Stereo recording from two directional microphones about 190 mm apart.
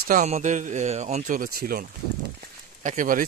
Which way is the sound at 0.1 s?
40° right (ahead or behind).